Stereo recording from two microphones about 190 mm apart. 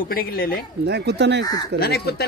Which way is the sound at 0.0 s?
50° left (ahead or behind).